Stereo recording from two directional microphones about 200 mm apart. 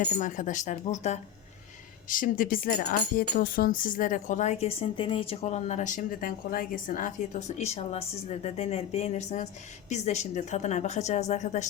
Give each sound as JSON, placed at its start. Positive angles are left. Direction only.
{"t": 0.0, "sound": "speech", "side_deg": 40}